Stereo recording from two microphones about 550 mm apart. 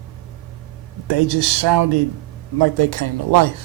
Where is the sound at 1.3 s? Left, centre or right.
Right.